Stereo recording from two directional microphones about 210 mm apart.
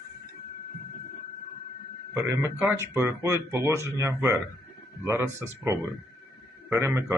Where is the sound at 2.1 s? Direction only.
10° right (ahead or behind).